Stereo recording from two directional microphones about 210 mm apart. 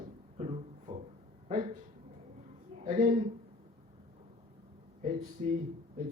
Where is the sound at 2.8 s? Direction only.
40° right (ahead or behind).